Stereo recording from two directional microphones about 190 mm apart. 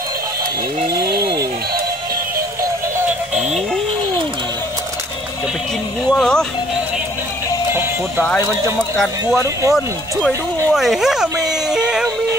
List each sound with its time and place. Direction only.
6.0 s speech: centre (ahead or behind)
8.2 s speech: 10° left (ahead or behind)
9.4 s speech: 15° right (ahead or behind)
10.7 s speech: centre (ahead or behind)